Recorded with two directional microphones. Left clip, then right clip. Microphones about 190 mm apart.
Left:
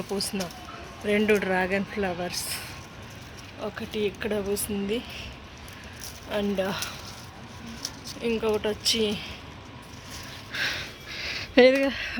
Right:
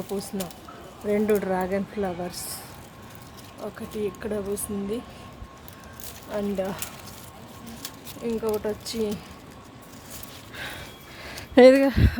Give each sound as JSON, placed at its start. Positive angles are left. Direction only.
{"t": 0.1, "sound": "speech", "side_deg": 0}
{"t": 3.6, "sound": "speech", "side_deg": 10}
{"t": 6.3, "sound": "speech", "side_deg": 5}
{"t": 8.2, "sound": "speech", "side_deg": 5}
{"t": 10.5, "sound": "a sound", "side_deg": -5}
{"t": 11.6, "sound": "speech", "side_deg": -35}